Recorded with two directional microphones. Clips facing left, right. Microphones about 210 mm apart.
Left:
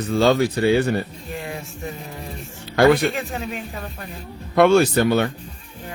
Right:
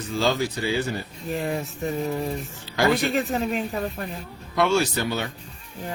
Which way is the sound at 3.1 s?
40° right (ahead or behind).